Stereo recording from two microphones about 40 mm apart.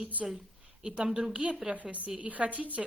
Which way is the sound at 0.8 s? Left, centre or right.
Right.